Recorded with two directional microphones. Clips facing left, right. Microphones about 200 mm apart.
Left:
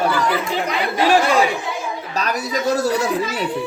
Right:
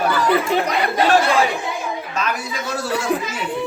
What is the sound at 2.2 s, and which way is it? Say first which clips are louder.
Speech: left 5 dB; 40° left (ahead or behind).